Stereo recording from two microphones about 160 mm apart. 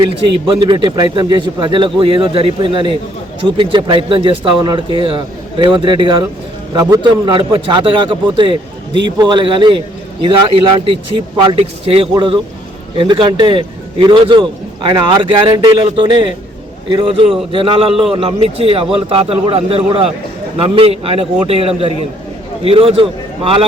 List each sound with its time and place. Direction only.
0.1 s a man's voice: 35° right (ahead or behind)